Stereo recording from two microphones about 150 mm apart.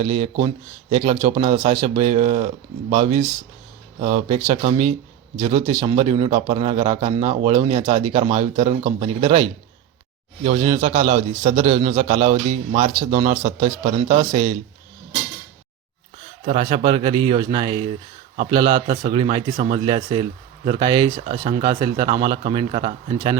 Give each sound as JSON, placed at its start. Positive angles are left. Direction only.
{"t": 0.0, "sound": "a man's voice", "side_deg": -40}
{"t": 10.4, "sound": "a man's voice", "side_deg": -45}
{"t": 16.6, "sound": "a man's voice", "side_deg": -35}